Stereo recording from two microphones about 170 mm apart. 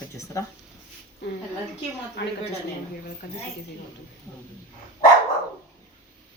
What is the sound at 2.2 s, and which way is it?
Speech, 90° left.